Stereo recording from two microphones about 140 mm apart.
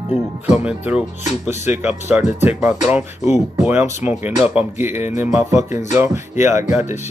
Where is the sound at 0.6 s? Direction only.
10° right (ahead or behind).